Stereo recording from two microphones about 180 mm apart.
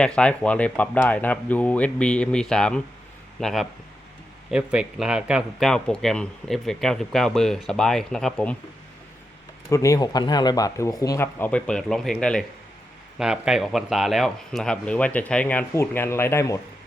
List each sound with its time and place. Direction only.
0.0 s speech: 5° left (ahead or behind)
9.6 s speech: 15° left (ahead or behind)